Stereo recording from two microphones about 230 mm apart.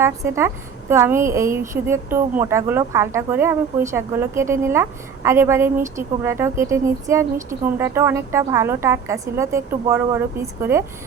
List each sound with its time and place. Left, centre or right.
0.0 s a woman's voice: centre